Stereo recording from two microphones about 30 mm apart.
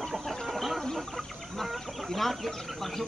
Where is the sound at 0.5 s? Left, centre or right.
Centre.